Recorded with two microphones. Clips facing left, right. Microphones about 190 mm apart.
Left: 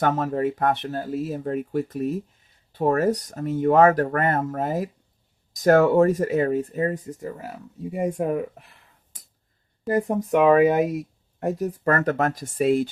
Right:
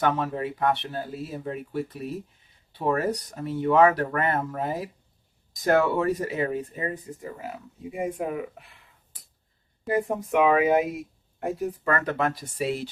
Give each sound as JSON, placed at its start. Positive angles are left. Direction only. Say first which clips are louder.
{"t": 0.0, "sound": "speech", "louder": "left 3 dB", "side_deg": 45}
{"t": 8.0, "sound": "speech", "louder": "left 5 dB", "side_deg": 40}
{"t": 9.8, "sound": "speech", "louder": "left 3 dB", "side_deg": 40}